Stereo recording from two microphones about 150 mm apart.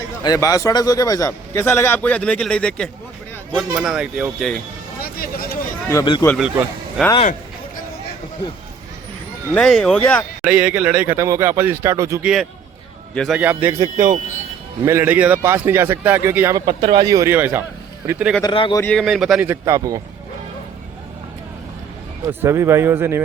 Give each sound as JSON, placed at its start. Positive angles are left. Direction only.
{"t": 0.2, "sound": "a man's voice", "side_deg": 25}
{"t": 4.9, "sound": "a sound", "side_deg": 80}
{"t": 5.9, "sound": "speech", "side_deg": 25}
{"t": 9.6, "sound": "speech", "side_deg": 5}
{"t": 10.4, "sound": "speech", "side_deg": -5}
{"t": 12.2, "sound": "speech", "side_deg": -5}
{"t": 13.7, "sound": "speech", "side_deg": -30}
{"t": 14.8, "sound": "speech", "side_deg": -15}
{"t": 18.4, "sound": "speech", "side_deg": 30}
{"t": 18.8, "sound": "speech", "side_deg": 5}
{"t": 19.5, "sound": "speech", "side_deg": -20}
{"t": 22.3, "sound": "speech", "side_deg": -15}